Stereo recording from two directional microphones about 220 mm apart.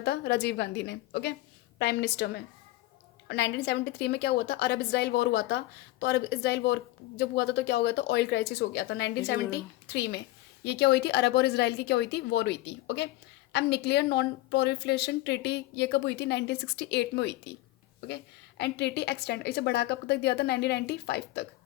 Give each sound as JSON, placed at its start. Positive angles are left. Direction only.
{"t": 0.0, "sound": "a woman's voice", "side_deg": 50}